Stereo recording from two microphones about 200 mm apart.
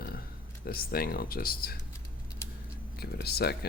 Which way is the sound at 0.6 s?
50° left (ahead or behind).